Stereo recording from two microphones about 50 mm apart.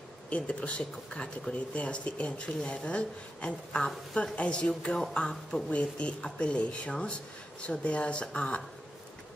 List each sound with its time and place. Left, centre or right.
0.3 s speech: left